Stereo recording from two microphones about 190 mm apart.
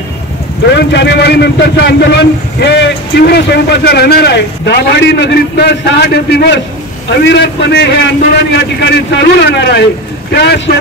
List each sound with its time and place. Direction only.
0.7 s a man's voice: 60° left (ahead or behind)